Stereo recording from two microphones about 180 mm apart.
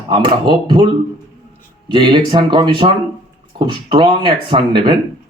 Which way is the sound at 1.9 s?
25° right (ahead or behind).